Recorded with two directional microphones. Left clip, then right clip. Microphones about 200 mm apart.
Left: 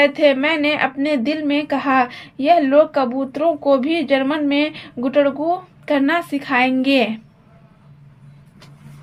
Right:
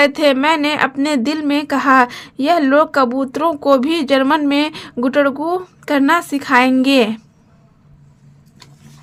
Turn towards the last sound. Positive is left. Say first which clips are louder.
# right 3 dB
turn(degrees=-35)  # may be behind; listen again after turning